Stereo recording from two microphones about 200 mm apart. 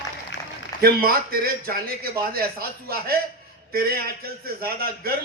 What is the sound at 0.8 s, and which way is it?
A man's voice, 50° right (ahead or behind).